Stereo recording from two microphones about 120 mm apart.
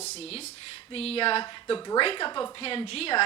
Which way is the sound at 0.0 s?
60° left (ahead or behind).